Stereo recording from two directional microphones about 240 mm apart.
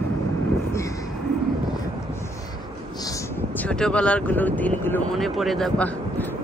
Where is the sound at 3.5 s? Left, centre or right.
Centre.